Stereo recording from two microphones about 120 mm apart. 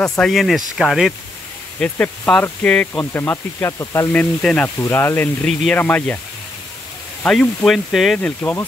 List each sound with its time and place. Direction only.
0.2 s speech: centre (ahead or behind)
1.8 s speech: 10° left (ahead or behind); by 4.1 s 25° left (ahead or behind)
4.1 s speech: 10° left (ahead or behind)
4.7 s speech: 20° left (ahead or behind)
5.5 s speech: 5° left (ahead or behind)
5.8 s speech: 15° left (ahead or behind)
7.2 s speech: 5° left (ahead or behind)
8.2 s speech: 15° left (ahead or behind)